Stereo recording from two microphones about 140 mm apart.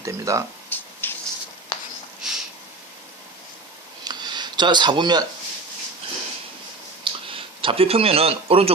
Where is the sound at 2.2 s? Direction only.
5° right (ahead or behind).